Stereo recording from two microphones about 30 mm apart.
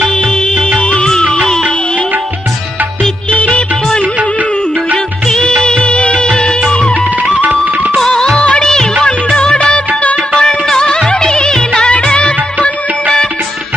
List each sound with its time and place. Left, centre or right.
0.0 s music: centre
0.7 s music: left
5.8 s music: left
6.2 s music: left
8.5 s music: centre
10.3 s music: centre
11.9 s music of bollywood: left